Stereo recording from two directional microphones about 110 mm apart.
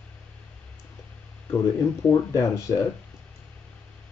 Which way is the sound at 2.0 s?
30° left (ahead or behind).